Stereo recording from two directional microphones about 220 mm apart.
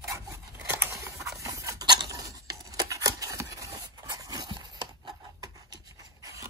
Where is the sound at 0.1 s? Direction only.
10° right (ahead or behind).